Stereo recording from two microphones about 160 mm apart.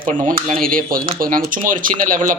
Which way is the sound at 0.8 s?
60° right (ahead or behind).